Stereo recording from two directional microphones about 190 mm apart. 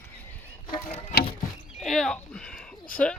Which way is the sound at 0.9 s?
30° left (ahead or behind).